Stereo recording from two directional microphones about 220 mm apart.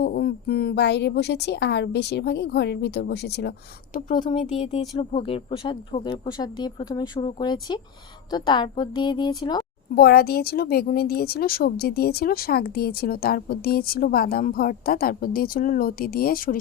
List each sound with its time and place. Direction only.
0.0 s speech: 45° left (ahead or behind)
4.1 s speech: 20° left (ahead or behind)
9.9 s speech: 45° left (ahead or behind)